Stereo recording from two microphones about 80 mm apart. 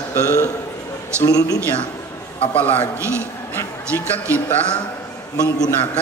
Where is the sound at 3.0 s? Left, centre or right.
Right.